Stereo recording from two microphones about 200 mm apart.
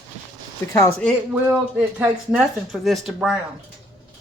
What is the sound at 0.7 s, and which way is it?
Speech, 15° left (ahead or behind).